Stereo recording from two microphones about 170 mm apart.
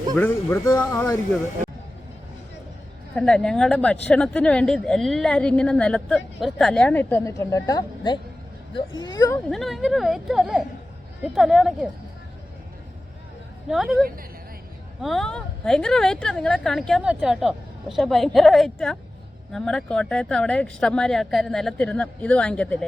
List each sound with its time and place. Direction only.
0.2 s speech: 15° left (ahead or behind)
3.2 s a woman's voice: 5° left (ahead or behind); by 9.4 s 20° left (ahead or behind)
9.5 s a woman's voice: centre (ahead or behind)
13.7 s a woman's voice: centre (ahead or behind)
15.0 s a woman's voice: centre (ahead or behind)